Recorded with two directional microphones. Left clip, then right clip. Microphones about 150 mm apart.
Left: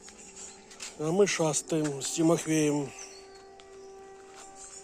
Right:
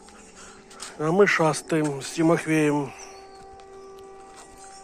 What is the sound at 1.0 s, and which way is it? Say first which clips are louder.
Speech: right 7 dB; 10° left (ahead or behind).